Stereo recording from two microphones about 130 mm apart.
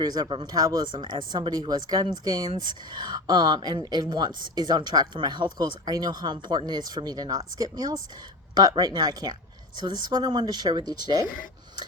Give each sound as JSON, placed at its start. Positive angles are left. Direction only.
{"t": 0.0, "sound": "speech", "side_deg": -30}